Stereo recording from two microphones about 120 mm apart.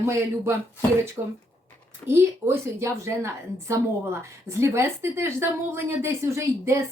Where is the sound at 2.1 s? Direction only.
20° right (ahead or behind).